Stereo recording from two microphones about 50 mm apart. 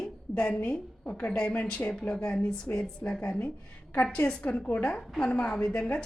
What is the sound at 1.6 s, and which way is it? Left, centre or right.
Speech, left.